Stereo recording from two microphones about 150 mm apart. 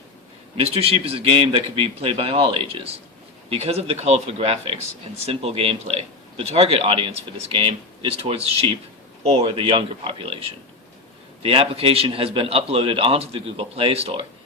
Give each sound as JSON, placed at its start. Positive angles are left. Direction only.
{"t": 0.6, "sound": "a man's voice", "side_deg": -40}